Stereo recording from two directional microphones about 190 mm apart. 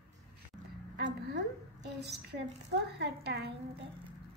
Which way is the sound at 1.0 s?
65° right (ahead or behind).